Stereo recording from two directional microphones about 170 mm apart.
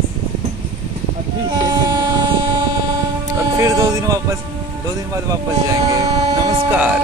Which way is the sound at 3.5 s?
20° right (ahead or behind).